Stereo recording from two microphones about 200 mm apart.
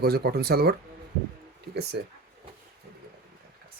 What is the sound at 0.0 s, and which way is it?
Speech, 50° right (ahead or behind).